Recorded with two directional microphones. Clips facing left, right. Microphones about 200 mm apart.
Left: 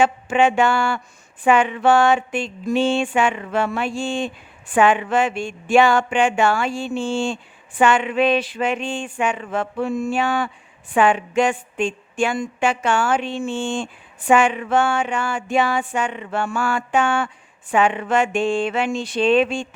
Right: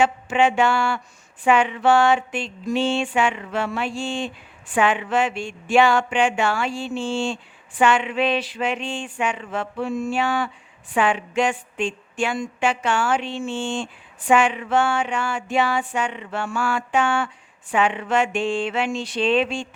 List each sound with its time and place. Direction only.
0.0 s music: 50° left (ahead or behind)